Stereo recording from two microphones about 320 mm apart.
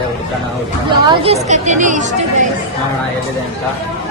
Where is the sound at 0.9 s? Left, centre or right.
Centre.